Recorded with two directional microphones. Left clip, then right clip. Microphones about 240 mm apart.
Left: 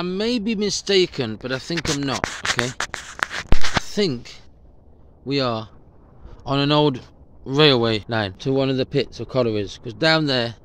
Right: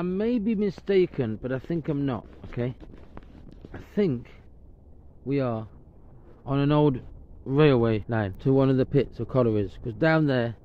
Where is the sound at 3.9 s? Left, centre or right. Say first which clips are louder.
Right 1 dB; centre.